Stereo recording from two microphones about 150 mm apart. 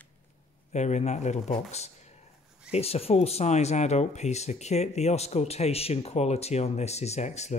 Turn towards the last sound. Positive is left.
turn(degrees=50)  # may be behind; listen again after turning